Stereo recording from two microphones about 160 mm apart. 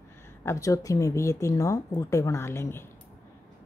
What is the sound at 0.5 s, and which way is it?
Speech, 20° left (ahead or behind).